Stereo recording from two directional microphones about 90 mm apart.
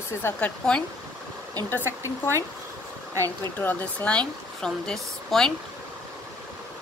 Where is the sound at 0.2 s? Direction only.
25° left (ahead or behind).